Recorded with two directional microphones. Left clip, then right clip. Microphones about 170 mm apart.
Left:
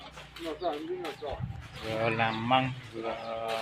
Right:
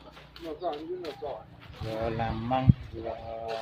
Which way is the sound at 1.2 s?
40° left (ahead or behind).